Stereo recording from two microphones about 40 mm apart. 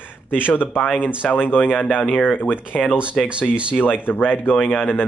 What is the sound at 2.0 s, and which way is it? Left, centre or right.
Speech, left.